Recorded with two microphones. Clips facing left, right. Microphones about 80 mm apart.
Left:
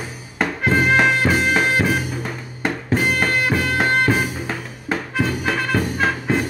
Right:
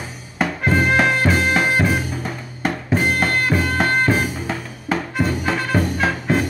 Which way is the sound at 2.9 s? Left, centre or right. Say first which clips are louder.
Even; centre.